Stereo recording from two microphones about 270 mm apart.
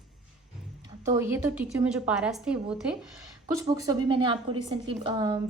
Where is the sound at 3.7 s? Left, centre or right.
Centre.